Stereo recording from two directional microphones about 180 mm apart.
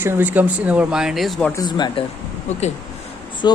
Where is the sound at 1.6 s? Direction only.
25° left (ahead or behind).